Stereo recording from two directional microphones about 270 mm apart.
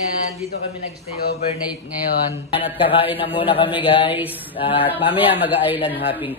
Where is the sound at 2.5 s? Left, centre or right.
Centre.